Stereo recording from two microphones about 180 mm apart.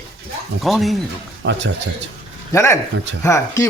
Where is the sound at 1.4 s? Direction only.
75° right (ahead or behind).